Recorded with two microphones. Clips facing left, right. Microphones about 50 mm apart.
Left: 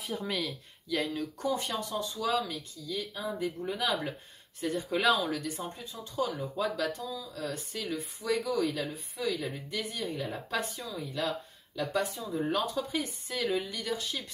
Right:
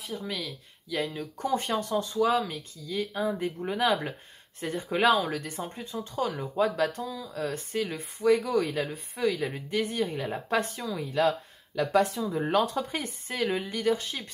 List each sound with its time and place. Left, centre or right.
0.0 s speech: centre
1.4 s speech: right
11.7 s speech: right
12.5 s speech: right